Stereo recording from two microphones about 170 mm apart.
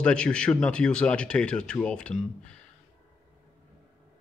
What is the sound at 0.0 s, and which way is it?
Speech, 5° left (ahead or behind).